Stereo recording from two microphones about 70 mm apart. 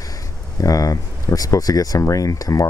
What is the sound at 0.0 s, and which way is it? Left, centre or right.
Speech, left.